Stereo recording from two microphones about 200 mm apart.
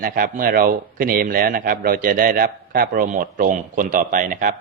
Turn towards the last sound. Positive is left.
turn(degrees=-40)  # may be behind; listen again after turning